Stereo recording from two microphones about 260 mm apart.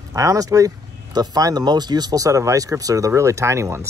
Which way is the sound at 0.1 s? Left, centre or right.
Centre.